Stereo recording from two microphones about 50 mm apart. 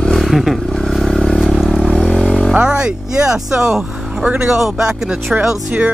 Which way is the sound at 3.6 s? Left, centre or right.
Centre.